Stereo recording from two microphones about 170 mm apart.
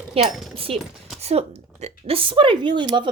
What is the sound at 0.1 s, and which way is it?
Speech, 35° right (ahead or behind).